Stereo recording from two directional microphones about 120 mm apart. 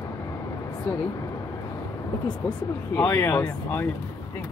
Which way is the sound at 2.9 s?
20° left (ahead or behind).